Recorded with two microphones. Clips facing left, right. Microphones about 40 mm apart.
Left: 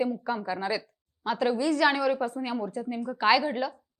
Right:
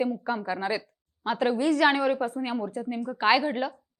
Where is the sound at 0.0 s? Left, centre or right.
Centre.